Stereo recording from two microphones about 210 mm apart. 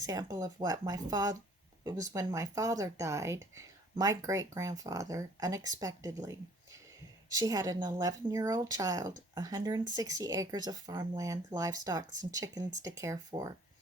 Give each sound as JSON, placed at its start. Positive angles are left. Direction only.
{"t": 0.0, "sound": "speech", "side_deg": -15}